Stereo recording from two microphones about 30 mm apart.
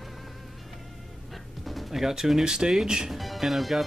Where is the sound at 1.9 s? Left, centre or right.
Centre.